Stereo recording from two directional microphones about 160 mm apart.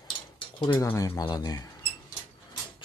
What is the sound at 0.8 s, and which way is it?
Speech, 20° left (ahead or behind).